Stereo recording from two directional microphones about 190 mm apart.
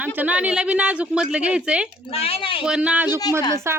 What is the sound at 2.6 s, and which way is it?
A woman's voice, 5° right (ahead or behind).